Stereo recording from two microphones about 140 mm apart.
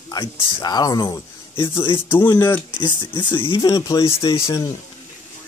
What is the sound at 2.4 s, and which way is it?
Speech, 15° left (ahead or behind).